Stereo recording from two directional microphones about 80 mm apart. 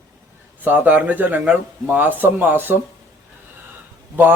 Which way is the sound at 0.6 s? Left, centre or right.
Right.